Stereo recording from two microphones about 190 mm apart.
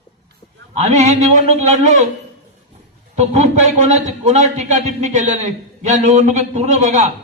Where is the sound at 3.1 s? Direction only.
35° right (ahead or behind).